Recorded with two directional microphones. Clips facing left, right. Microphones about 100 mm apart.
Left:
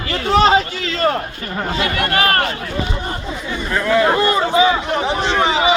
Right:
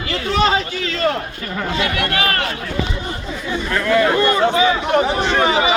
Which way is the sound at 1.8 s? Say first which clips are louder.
Left 3 dB; 40° left (ahead or behind).